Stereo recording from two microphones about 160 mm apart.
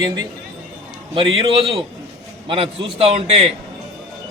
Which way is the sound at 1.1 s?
35° right (ahead or behind).